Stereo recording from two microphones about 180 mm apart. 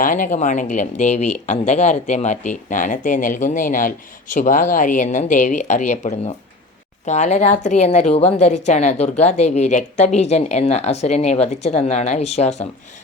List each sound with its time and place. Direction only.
0.0 s speech: 45° left (ahead or behind)